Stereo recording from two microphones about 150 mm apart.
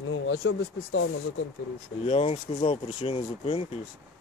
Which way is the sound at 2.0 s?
45° left (ahead or behind).